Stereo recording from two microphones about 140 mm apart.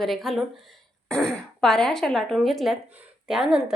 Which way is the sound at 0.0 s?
Centre (ahead or behind).